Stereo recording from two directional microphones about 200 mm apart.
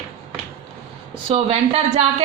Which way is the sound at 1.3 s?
30° right (ahead or behind).